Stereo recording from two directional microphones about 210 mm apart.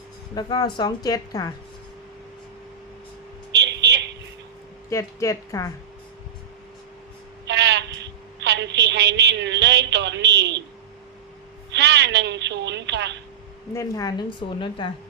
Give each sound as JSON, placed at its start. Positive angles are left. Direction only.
{"t": 0.3, "sound": "a woman's voice", "side_deg": 20}
{"t": 3.5, "sound": "a sound", "side_deg": -55}
{"t": 4.9, "sound": "a woman's voice", "side_deg": 15}
{"t": 7.4, "sound": "a sound", "side_deg": -55}
{"t": 11.7, "sound": "a woman's voice", "side_deg": -55}
{"t": 13.7, "sound": "a woman's voice", "side_deg": 15}